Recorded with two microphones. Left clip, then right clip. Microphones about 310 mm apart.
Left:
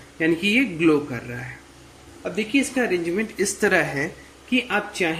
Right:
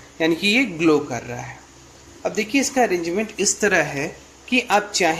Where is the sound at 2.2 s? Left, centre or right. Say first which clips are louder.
Right 2 dB; centre.